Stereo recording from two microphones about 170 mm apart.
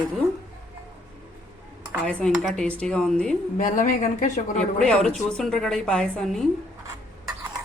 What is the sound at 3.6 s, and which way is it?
Speech, 50° left (ahead or behind).